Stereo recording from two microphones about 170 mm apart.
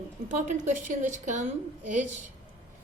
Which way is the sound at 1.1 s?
45° right (ahead or behind).